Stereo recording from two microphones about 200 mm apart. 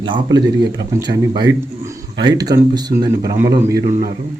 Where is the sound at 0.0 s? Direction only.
20° right (ahead or behind).